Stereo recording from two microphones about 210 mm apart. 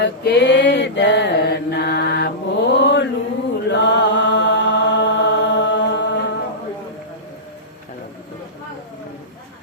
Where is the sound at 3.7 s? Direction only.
55° left (ahead or behind).